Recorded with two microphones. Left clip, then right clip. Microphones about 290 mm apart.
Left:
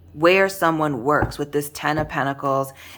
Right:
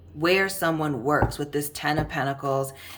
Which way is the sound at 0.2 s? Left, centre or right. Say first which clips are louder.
Left 6 dB; centre.